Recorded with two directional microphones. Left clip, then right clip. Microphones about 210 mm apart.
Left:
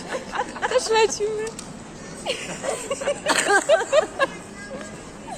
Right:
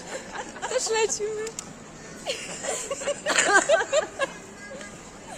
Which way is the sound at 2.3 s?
10° left (ahead or behind).